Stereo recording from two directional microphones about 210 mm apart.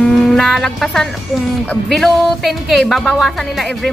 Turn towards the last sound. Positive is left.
turn(degrees=0)  # may be behind; listen again after turning